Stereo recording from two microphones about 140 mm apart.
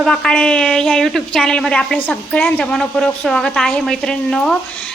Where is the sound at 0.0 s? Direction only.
5° left (ahead or behind).